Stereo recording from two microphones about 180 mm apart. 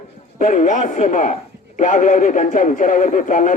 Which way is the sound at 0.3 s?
45° left (ahead or behind).